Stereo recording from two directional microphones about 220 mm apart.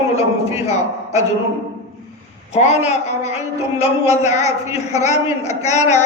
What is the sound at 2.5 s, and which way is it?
A man's voice, 30° left (ahead or behind).